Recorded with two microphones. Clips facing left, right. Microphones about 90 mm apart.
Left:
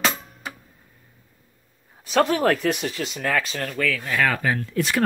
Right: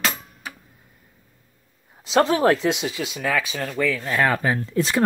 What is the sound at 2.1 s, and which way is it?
Speech, 25° right (ahead or behind).